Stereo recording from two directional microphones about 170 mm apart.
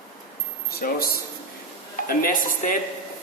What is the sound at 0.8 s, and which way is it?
Speech, 60° left (ahead or behind).